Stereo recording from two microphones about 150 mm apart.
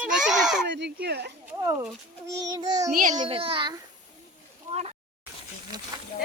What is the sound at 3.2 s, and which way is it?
Speech, 35° right (ahead or behind).